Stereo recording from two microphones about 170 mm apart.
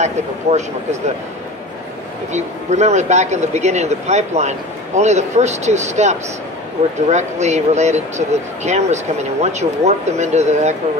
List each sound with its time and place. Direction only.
0.0 s speech: 40° right (ahead or behind)
2.3 s speech: 40° right (ahead or behind)